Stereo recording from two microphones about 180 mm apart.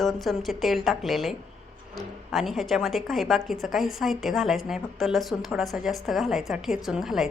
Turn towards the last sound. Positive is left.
turn(degrees=0)  # may be behind; listen again after turning